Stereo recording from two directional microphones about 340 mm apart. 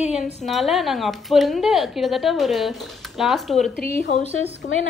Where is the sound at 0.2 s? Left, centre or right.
Centre.